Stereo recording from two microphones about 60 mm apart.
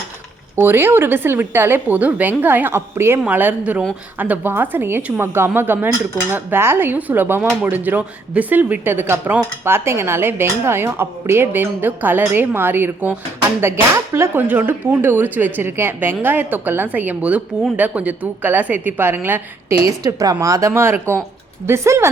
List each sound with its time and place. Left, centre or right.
0.5 s speech: right
1.9 s a woman's voice: right
3.2 s speech: right
3.6 s a woman's voice: centre
4.2 s speech: right
13.6 s speech: right
19.7 s speech: right
20.1 s speech: right
20.7 s speech: right